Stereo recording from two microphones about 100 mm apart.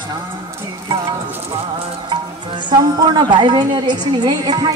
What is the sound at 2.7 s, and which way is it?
A woman's voice, 45° right (ahead or behind).